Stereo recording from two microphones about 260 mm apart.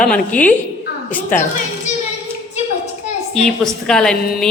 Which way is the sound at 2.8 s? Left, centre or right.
Left.